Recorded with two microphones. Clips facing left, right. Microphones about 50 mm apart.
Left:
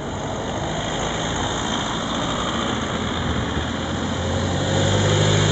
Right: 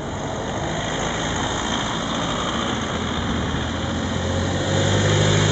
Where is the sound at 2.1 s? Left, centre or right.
Centre.